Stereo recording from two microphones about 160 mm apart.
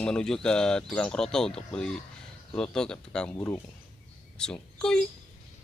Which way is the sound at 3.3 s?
15° left (ahead or behind).